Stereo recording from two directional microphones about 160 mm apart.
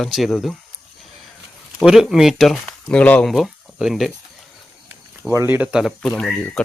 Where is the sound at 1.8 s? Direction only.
Centre (ahead or behind).